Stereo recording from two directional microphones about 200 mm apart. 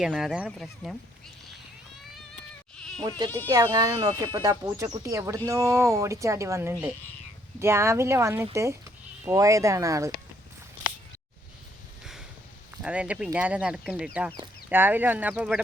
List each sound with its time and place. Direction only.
0.0 s speech: centre (ahead or behind)
2.7 s goat: 5° left (ahead or behind)
3.0 s speech: 20° right (ahead or behind)
12.7 s speech: 5° right (ahead or behind)